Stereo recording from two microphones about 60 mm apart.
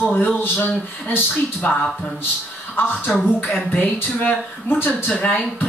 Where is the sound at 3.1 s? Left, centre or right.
Centre.